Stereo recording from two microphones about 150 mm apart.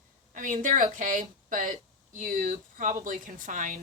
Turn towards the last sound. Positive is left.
turn(degrees=-60)  # may be behind; listen again after turning